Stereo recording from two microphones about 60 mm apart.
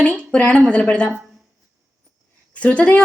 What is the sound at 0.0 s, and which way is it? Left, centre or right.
A woman's voice, centre.